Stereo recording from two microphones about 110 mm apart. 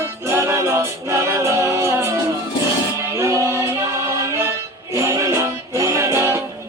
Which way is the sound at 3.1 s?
25° right (ahead or behind).